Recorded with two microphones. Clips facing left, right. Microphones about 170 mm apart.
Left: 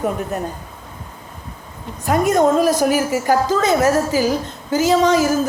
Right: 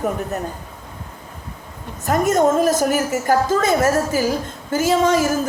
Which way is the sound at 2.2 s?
45° right (ahead or behind).